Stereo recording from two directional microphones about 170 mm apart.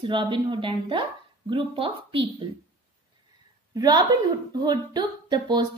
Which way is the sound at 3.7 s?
25° right (ahead or behind).